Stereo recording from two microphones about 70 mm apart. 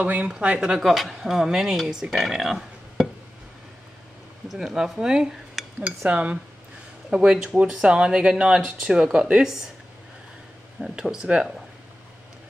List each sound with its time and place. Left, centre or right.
0.0 s speech: right; by 3.1 s centre
4.5 s speech: centre
10.8 s speech: centre